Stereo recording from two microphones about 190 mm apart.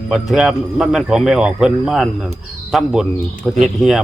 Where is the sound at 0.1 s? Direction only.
Centre (ahead or behind).